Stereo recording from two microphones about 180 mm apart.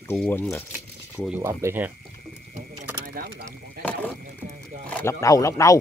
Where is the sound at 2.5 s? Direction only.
50° right (ahead or behind).